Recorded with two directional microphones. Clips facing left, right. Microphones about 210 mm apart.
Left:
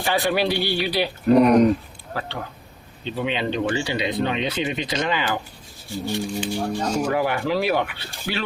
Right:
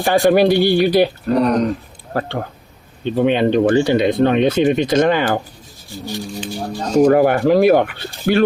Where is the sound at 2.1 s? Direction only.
50° right (ahead or behind).